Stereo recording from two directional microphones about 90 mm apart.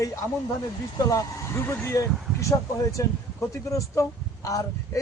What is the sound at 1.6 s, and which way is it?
A man's voice, 30° left (ahead or behind).